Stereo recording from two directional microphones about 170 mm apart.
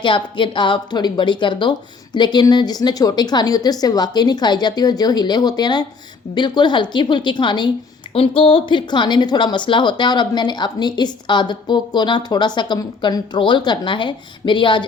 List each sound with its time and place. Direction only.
0.0 s speech: 30° left (ahead or behind)